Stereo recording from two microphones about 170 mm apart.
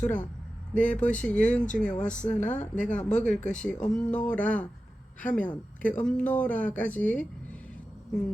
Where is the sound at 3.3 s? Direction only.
45° left (ahead or behind).